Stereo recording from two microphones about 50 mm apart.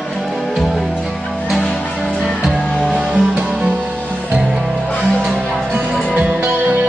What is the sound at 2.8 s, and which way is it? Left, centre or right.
Music, right.